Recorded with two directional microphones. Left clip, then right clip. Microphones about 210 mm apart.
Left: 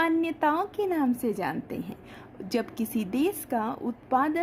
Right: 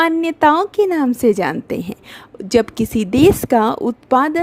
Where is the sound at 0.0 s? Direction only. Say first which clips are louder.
Right 11 dB; 45° right (ahead or behind).